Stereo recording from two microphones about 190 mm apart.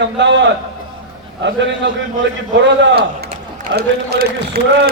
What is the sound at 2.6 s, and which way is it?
A man's voice, 55° right (ahead or behind).